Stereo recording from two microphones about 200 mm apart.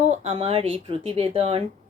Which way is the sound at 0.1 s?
30° right (ahead or behind).